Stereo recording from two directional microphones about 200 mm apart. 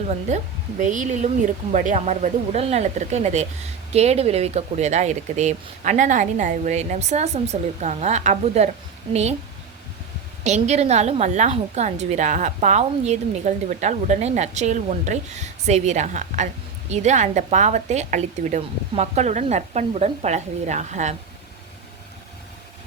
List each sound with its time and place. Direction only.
0.3 s a woman's voice: 35° right (ahead or behind)
10.4 s a woman's voice: 35° right (ahead or behind)